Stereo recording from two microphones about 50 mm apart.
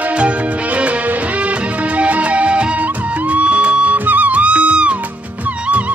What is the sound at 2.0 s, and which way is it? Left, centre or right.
Music, right.